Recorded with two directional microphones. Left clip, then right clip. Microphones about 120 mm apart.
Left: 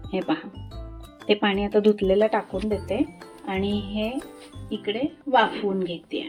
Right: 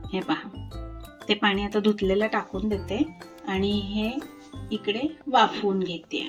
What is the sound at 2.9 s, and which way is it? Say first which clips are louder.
A woman's voice: left 2 dB; 55° left (ahead or behind).